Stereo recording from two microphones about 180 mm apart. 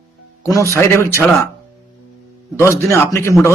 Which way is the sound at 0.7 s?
15° left (ahead or behind).